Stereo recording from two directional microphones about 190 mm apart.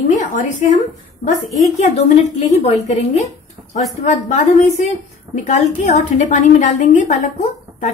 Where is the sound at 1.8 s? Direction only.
35° left (ahead or behind).